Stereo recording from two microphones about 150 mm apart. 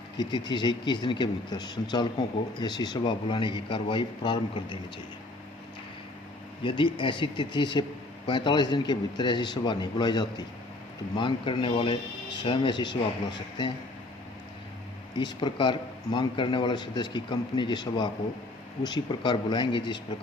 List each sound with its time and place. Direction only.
0.2 s a man's voice: 30° left (ahead or behind)
6.6 s a man's voice: 35° left (ahead or behind)
15.2 s a man's voice: 30° left (ahead or behind)